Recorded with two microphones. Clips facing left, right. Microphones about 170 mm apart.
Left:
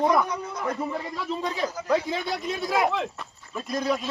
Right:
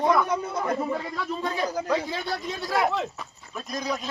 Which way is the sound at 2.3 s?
20° left (ahead or behind).